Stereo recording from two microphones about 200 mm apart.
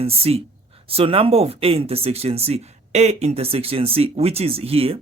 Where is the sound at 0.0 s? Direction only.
30° right (ahead or behind).